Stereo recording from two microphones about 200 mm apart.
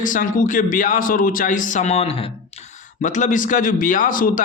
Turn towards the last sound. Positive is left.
turn(degrees=45)  # may be behind; listen again after turning